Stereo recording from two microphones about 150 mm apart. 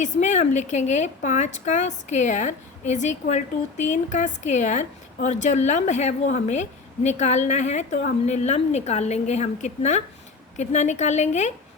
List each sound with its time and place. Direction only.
0.0 s a woman's voice: 50° left (ahead or behind)